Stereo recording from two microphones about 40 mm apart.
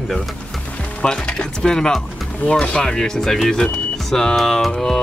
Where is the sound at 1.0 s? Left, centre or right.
Centre.